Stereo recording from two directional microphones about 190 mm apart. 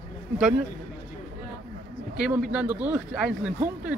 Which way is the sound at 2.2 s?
5° right (ahead or behind).